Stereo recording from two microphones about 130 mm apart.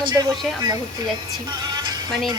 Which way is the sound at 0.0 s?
35° right (ahead or behind).